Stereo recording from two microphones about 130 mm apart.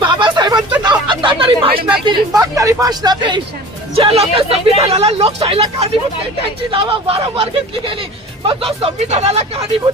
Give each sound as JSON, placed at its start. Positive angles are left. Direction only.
{"t": 0.0, "sound": "a sound", "side_deg": -40}
{"t": 2.0, "sound": "speech", "side_deg": -25}
{"t": 3.9, "sound": "speech", "side_deg": -50}
{"t": 8.4, "sound": "speech", "side_deg": -45}